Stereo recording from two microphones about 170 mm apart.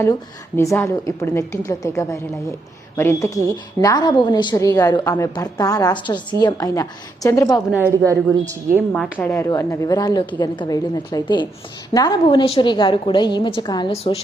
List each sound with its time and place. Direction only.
0.0 s a woman's voice: 15° left (ahead or behind)
7.7 s a woman's voice: 15° right (ahead or behind)
9.1 s a woman's voice: 15° left (ahead or behind)
13.9 s a woman's voice: 35° left (ahead or behind)